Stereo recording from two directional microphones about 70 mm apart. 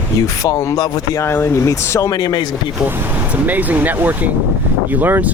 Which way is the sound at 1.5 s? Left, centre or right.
Left.